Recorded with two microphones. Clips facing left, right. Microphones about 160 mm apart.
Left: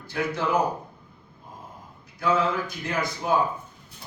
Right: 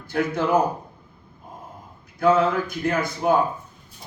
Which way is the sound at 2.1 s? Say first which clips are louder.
Right 5 dB; 55° right (ahead or behind).